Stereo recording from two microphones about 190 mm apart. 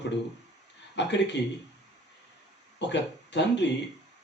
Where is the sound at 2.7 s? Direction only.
65° left (ahead or behind).